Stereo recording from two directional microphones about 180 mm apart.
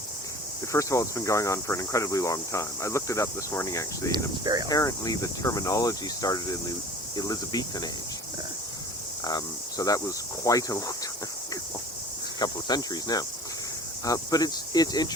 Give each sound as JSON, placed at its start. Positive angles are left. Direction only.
{"t": 0.7, "sound": "speech", "side_deg": 15}
{"t": 9.2, "sound": "speech", "side_deg": 20}
{"t": 12.4, "sound": "speech", "side_deg": 20}